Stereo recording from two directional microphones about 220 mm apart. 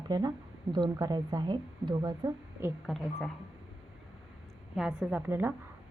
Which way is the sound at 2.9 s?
Centre (ahead or behind).